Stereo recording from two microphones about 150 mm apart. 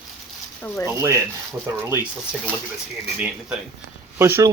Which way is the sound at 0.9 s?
20° right (ahead or behind).